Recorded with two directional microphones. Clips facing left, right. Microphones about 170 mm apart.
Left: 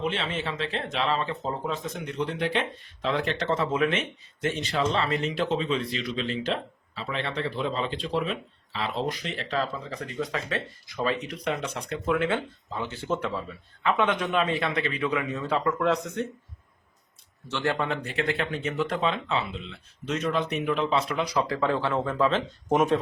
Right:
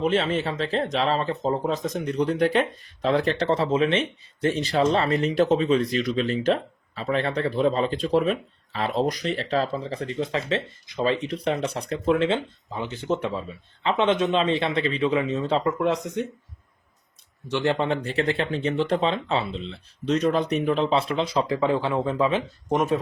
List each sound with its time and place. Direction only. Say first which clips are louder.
0.0 s speech: right 7 dB; 40° right (ahead or behind); by 16.2 s 15° right (ahead or behind)
17.5 s speech: right 4 dB; 20° right (ahead or behind)
22.7 s speech: even; centre (ahead or behind)